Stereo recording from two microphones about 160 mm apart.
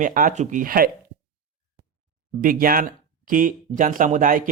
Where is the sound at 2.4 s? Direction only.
60° right (ahead or behind).